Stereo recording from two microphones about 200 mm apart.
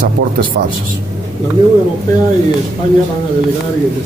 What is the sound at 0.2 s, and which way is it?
Speech, 50° right (ahead or behind).